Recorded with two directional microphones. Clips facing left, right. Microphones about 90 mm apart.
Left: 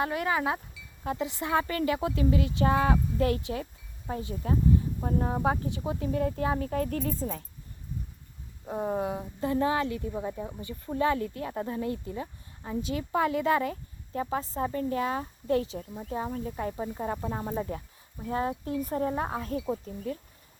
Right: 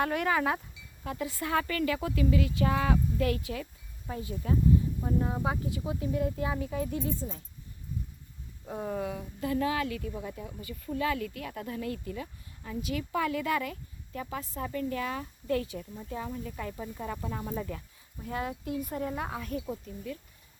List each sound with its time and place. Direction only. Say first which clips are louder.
0.3 s speech: even; 20° left (ahead or behind)
6.0 s speech: left 3 dB; 45° left (ahead or behind)
8.6 s speech: left 4 dB; 25° left (ahead or behind)